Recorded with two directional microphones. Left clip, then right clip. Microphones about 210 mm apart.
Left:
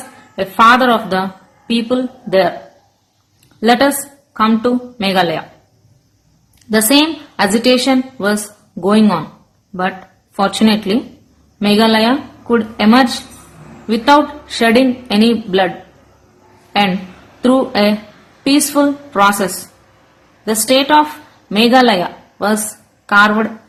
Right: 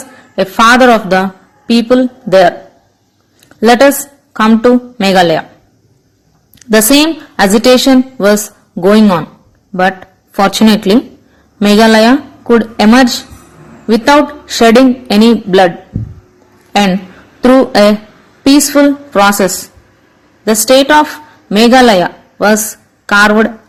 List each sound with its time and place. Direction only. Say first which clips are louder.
0.3 s speech: right 3 dB; 30° right (ahead or behind)
3.6 s speech: right 6 dB; 25° right (ahead or behind)
6.6 s a woman's voice: right 5 dB; 30° right (ahead or behind)
10.3 s a woman's voice: right 5 dB; 30° right (ahead or behind)
17.4 s speech: right 7 dB; 30° right (ahead or behind)
23.0 s speech: right 4 dB; 30° right (ahead or behind)